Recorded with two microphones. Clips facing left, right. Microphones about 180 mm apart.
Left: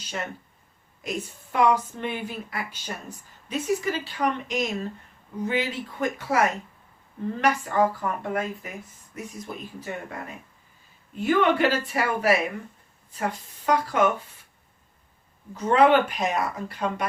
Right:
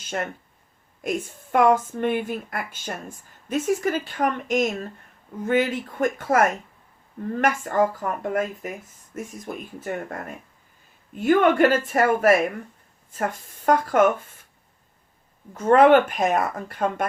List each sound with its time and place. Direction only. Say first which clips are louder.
0.0 s a woman's voice: right 4 dB; 50° right (ahead or behind)
15.5 s a woman's voice: right 4 dB; 50° right (ahead or behind)